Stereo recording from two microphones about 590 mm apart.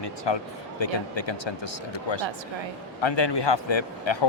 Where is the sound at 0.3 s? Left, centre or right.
Left.